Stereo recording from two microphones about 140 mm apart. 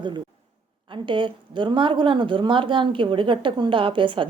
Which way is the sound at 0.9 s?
35° right (ahead or behind).